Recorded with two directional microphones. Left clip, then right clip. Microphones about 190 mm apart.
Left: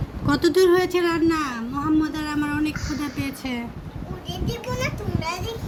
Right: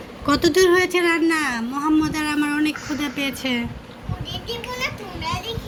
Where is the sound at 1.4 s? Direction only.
15° right (ahead or behind).